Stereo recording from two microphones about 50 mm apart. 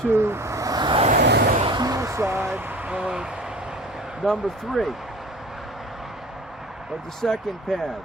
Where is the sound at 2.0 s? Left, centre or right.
Right.